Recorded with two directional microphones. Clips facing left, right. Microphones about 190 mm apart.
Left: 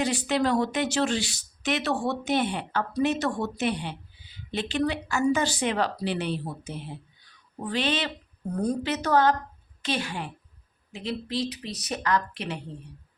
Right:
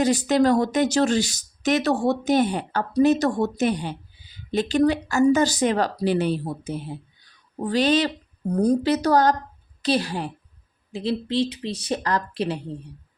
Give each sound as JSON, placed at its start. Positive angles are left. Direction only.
{"t": 0.0, "sound": "speech", "side_deg": -40}